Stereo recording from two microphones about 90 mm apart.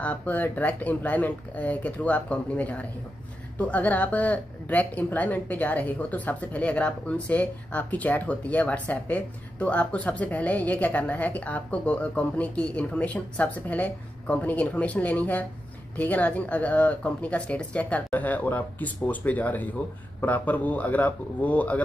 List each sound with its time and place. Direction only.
0.0 s speech: 15° left (ahead or behind)